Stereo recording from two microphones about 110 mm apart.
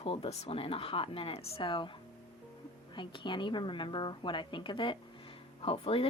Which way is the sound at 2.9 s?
45° left (ahead or behind).